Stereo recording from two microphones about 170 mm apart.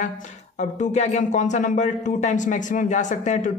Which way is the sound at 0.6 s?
45° left (ahead or behind).